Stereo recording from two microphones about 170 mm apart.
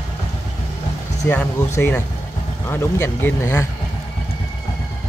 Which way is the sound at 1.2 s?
15° left (ahead or behind).